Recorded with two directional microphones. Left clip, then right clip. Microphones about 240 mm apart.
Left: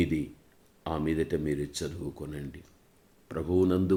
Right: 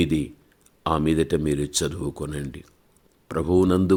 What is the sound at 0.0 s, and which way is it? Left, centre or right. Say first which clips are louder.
Speech: right 6 dB; right.